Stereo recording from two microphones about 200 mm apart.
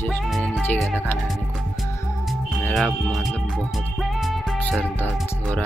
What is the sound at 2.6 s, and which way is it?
Speech, centre (ahead or behind).